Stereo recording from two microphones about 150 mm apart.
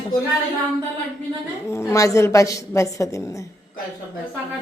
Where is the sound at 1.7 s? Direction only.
20° left (ahead or behind).